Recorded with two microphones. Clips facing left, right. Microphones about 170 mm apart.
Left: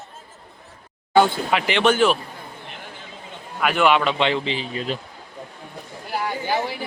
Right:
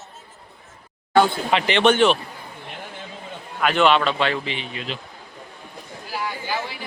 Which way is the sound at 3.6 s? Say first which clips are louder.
Even; 10° left (ahead or behind).